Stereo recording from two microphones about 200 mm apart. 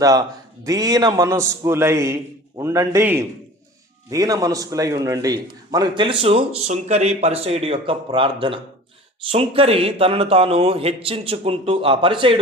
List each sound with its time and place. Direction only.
0.0 s a man's voice: 15° right (ahead or behind)